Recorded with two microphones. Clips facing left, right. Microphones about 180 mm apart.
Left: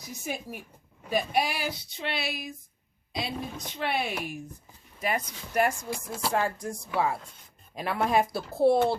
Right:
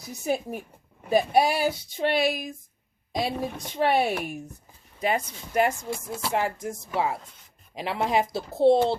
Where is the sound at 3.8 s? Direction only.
40° right (ahead or behind).